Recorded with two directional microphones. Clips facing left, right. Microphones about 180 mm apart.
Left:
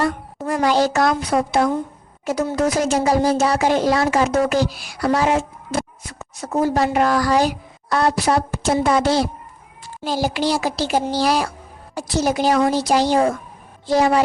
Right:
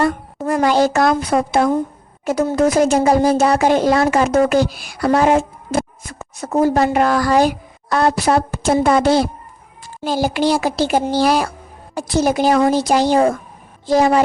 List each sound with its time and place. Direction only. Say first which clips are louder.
0.0 s a child's voice: right 4 dB; 50° right (ahead or behind)